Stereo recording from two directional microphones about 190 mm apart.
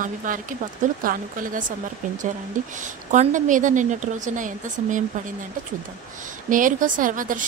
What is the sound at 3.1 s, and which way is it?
A woman's voice, 40° right (ahead or behind).